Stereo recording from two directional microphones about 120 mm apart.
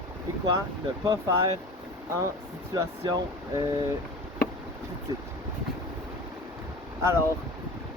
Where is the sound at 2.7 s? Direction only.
35° right (ahead or behind).